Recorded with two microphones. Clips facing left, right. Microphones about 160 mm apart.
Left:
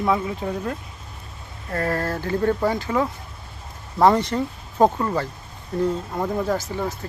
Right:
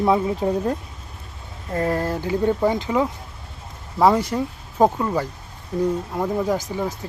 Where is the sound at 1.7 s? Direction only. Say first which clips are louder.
Right 2 dB; 15° right (ahead or behind).